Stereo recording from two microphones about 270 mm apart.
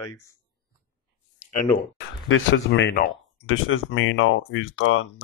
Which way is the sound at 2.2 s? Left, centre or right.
Left.